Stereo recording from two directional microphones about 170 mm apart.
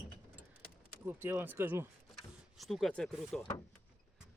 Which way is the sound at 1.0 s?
15° right (ahead or behind).